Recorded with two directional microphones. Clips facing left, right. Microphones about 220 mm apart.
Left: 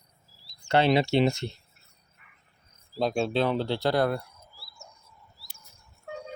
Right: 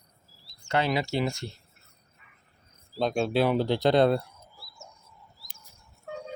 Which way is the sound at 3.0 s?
Centre (ahead or behind).